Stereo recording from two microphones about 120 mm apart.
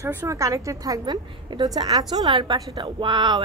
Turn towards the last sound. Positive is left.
turn(degrees=-40)  # may be behind; listen again after turning